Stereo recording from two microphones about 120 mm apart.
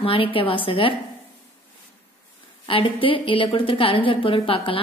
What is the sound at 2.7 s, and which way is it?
A woman's voice, 50° left (ahead or behind).